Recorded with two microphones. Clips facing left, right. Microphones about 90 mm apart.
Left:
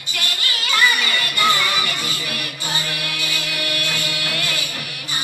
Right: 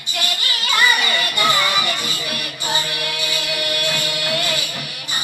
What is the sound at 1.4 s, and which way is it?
Music, 20° right (ahead or behind).